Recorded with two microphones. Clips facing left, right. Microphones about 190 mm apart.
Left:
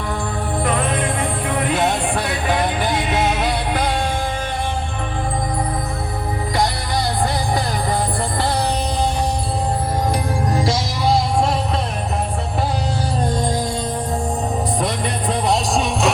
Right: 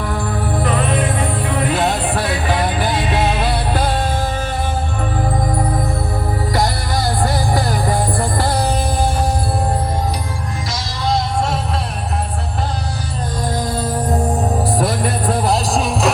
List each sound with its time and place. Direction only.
0.6 s music: centre (ahead or behind)
2.8 s music: 20° left (ahead or behind)
14.8 s music: 5° right (ahead or behind)